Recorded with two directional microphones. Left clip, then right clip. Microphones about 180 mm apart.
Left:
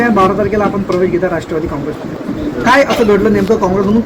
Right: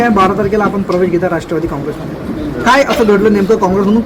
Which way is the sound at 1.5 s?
70° right (ahead or behind).